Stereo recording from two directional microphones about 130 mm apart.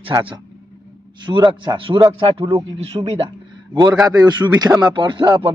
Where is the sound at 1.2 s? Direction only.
35° right (ahead or behind).